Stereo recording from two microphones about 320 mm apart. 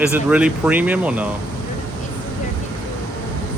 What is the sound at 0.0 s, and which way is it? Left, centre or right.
Speech, centre.